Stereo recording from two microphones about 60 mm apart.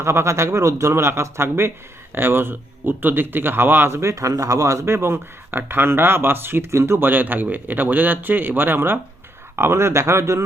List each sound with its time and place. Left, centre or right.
0.0 s speech: right
3.8 s speech: right
4.1 s speech: right
9.6 s speech: right